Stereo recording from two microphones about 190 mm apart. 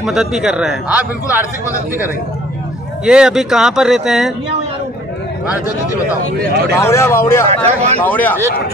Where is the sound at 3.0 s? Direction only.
5° right (ahead or behind).